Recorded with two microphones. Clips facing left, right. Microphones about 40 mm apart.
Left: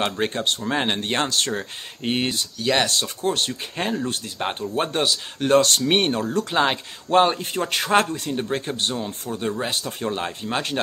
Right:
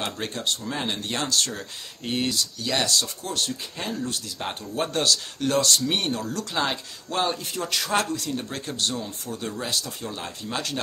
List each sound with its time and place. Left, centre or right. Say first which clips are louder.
0.0 s speech: left 6 dB; left
5.4 s speech: left 7 dB; left